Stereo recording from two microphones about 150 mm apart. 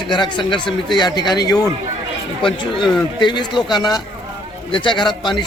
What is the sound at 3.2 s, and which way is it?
A man's voice, 30° left (ahead or behind).